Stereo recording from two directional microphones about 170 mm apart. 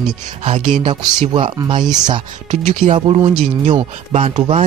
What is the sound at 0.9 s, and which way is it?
Speech, 25° right (ahead or behind).